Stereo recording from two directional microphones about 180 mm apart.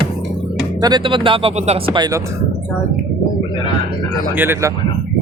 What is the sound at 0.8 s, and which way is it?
Speech, 25° right (ahead or behind).